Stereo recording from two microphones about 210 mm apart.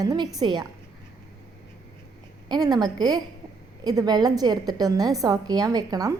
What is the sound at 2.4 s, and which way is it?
A woman's voice, 20° right (ahead or behind).